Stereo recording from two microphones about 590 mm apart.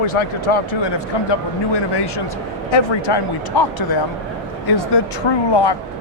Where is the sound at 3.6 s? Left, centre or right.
Left.